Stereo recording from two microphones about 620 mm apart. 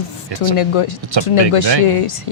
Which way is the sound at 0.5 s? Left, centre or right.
Left.